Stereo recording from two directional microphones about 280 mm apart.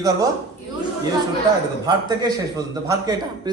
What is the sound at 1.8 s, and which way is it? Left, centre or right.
A man's voice, centre.